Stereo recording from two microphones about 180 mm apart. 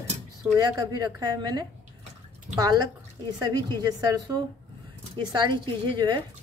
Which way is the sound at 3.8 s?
20° right (ahead or behind).